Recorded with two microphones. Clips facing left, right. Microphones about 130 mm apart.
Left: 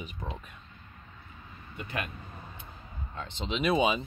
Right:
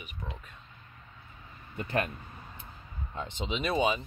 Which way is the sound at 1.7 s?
40° right (ahead or behind).